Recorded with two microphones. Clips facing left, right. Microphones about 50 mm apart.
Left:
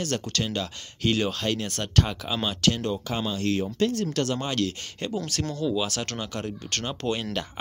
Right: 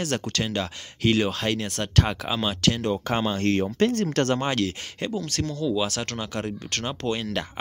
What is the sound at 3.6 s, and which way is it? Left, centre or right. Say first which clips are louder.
Speech: right 3 dB; right.